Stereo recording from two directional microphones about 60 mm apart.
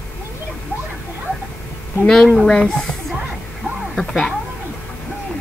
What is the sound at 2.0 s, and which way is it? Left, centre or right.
Speech, centre.